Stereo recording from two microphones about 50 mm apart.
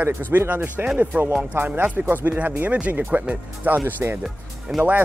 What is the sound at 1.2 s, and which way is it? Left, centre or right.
Speech, right.